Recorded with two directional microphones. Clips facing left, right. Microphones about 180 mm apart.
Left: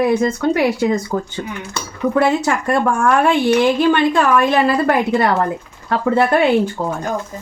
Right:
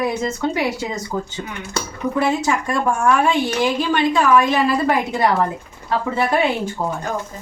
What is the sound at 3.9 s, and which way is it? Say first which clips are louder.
Speech: left 1 dB; 60° left (ahead or behind).